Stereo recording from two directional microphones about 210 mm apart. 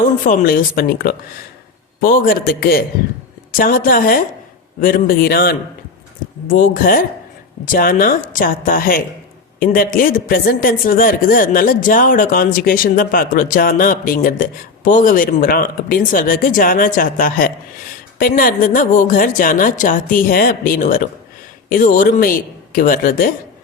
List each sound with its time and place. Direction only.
0.3 s a woman's voice: 45° left (ahead or behind)